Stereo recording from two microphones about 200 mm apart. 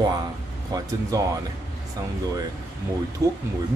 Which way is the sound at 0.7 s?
20° right (ahead or behind).